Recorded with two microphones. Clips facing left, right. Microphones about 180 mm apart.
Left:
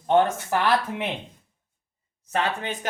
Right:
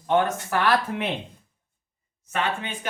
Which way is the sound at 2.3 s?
40° left (ahead or behind).